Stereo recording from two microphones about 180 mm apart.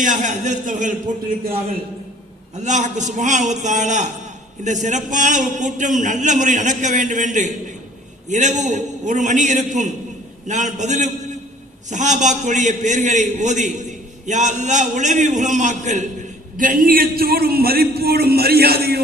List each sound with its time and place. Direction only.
0.0 s a man's voice: 45° right (ahead or behind)
2.6 s a man's voice: 40° right (ahead or behind); by 19.0 s 60° right (ahead or behind)